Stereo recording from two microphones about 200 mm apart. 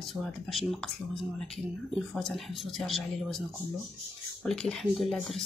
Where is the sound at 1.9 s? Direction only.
Centre (ahead or behind).